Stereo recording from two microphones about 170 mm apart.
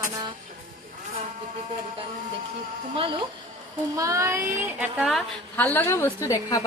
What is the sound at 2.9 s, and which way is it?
Speech, 30° right (ahead or behind).